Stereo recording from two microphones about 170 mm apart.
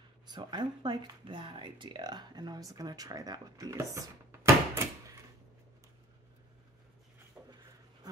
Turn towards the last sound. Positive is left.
turn(degrees=-10)  # may be behind; listen again after turning